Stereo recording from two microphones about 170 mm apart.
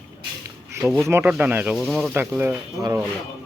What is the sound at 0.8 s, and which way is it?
Speech, centre (ahead or behind).